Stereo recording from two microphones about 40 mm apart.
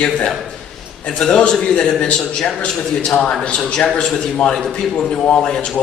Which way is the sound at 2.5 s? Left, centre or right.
Left.